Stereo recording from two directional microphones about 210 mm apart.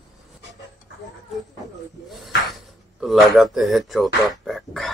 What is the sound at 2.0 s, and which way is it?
Speech, centre (ahead or behind).